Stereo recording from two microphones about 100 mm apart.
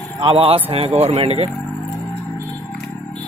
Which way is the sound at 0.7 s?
90° right.